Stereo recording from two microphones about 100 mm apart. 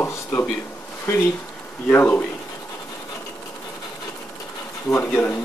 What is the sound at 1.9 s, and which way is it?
Speech, 20° left (ahead or behind).